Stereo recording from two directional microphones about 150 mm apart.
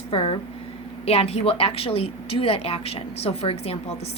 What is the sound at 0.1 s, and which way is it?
A woman's voice, 40° left (ahead or behind).